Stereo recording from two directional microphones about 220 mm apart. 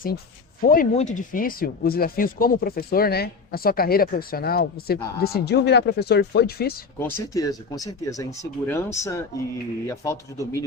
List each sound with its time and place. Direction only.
0.6 s speech: 40° left (ahead or behind)
7.0 s speech: 15° left (ahead or behind)